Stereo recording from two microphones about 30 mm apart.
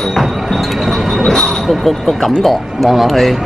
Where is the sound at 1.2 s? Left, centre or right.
Centre.